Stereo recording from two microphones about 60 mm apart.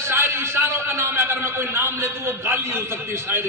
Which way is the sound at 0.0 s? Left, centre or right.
Right.